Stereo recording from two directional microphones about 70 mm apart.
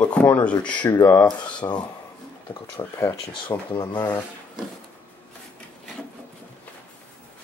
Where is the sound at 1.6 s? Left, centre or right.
Left.